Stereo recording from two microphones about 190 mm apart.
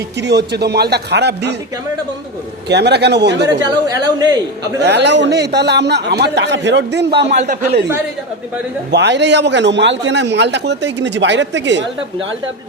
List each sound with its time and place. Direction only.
0.2 s a man's voice: 60° right (ahead or behind)
2.6 s a man's voice: 60° right (ahead or behind)
3.8 s a man's voice: 20° right (ahead or behind)
4.8 s a man's voice: 65° right (ahead or behind)
7.3 s speech: 45° right (ahead or behind)
8.9 s a man's voice: 65° right (ahead or behind)